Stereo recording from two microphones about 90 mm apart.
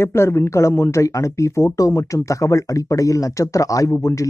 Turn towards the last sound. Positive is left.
turn(degrees=40)  # may be behind; listen again after turning